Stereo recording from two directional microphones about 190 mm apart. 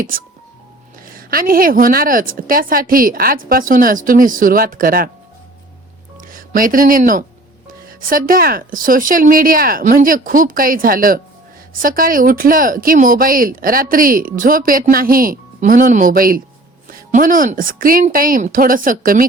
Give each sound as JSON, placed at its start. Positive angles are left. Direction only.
{"t": 1.0, "sound": "speech", "side_deg": -50}
{"t": 6.1, "sound": "speech", "side_deg": -45}